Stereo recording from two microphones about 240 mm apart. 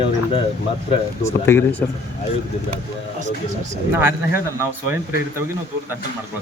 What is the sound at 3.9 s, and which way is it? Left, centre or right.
Speech, centre.